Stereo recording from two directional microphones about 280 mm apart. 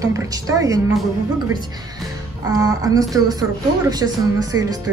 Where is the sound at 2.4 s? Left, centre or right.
Centre.